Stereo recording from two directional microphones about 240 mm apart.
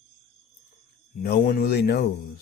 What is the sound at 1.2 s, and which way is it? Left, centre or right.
Speech, left.